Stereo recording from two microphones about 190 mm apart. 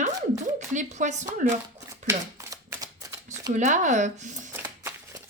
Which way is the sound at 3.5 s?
40° right (ahead or behind).